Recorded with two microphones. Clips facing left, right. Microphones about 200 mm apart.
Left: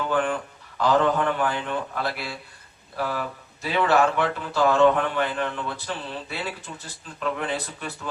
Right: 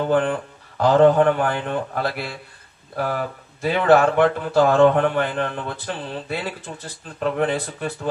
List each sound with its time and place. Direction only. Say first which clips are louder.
0.0 s speech: right 5 dB; 50° right (ahead or behind)